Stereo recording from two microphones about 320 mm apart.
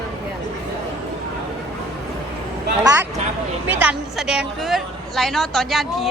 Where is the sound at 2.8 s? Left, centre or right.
Centre.